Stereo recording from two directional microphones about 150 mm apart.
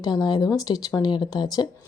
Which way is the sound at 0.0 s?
25° left (ahead or behind).